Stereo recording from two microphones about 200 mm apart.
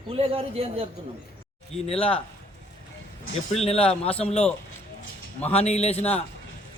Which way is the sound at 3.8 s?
5° left (ahead or behind).